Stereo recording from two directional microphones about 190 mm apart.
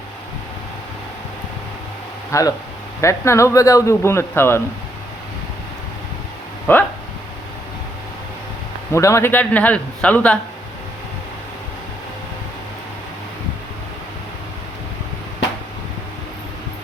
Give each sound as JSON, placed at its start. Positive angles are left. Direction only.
{"t": 2.3, "sound": "speech", "side_deg": 15}
{"t": 6.7, "sound": "speech", "side_deg": 10}
{"t": 8.9, "sound": "speech", "side_deg": 15}